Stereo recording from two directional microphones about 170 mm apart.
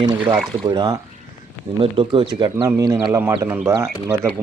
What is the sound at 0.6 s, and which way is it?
Speech, 25° right (ahead or behind).